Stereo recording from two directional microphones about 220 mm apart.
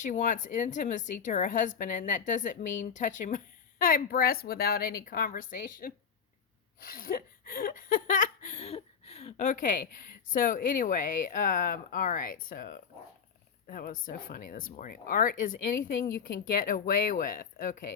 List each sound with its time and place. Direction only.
0.0 s speech: 35° left (ahead or behind)
6.7 s a sound: 40° left (ahead or behind)
10.3 s speech: 40° left (ahead or behind)